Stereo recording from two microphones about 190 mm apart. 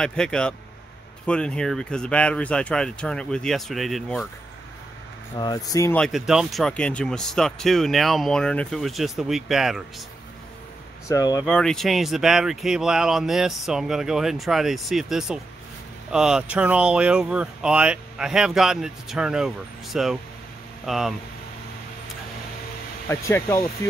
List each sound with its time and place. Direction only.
0.0 s speech: 5° left (ahead or behind)
5.4 s speech: 20° left (ahead or behind)
5.9 s speech: centre (ahead or behind)
11.1 s speech: 20° left (ahead or behind)
11.4 s speech: 5° left (ahead or behind)
23.0 s speech: 15° left (ahead or behind)